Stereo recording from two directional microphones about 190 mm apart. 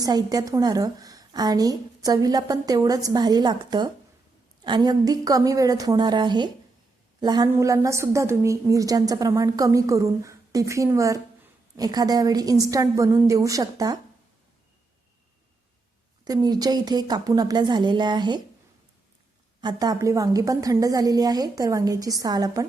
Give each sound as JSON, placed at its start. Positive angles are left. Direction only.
{"t": 0.0, "sound": "a woman's voice", "side_deg": -20}
{"t": 16.2, "sound": "a woman's voice", "side_deg": -20}
{"t": 19.6, "sound": "a woman's voice", "side_deg": -20}